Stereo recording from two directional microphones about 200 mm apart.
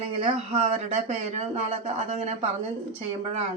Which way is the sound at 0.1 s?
25° right (ahead or behind).